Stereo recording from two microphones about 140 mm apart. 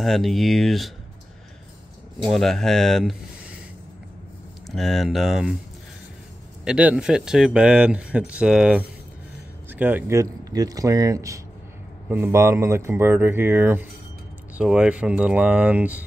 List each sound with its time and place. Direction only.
0.0 s speech: centre (ahead or behind)
2.3 s speech: centre (ahead or behind)
4.6 s speech: centre (ahead or behind)
6.6 s speech: 10° right (ahead or behind)